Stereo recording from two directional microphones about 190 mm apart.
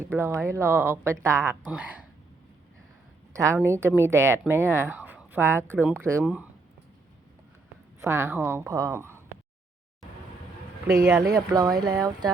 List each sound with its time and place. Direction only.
0.0 s a woman's voice: 10° right (ahead or behind)
3.3 s a woman's voice: 15° right (ahead or behind)
8.0 s a woman's voice: 15° right (ahead or behind)
11.2 s speech: 20° right (ahead or behind)